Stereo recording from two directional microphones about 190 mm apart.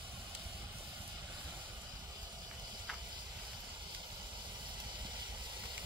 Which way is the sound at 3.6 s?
25° right (ahead or behind).